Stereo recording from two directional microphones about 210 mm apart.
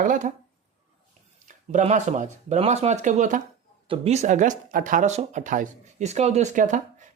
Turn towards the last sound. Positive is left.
turn(degrees=-35)  # may be behind; listen again after turning